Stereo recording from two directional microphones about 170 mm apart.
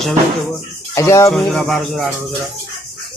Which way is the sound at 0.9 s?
20° left (ahead or behind).